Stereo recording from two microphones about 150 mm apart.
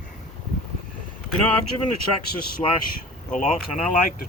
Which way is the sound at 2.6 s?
25° left (ahead or behind).